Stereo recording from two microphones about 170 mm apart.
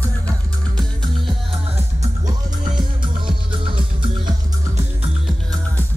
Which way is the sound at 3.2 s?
30° right (ahead or behind).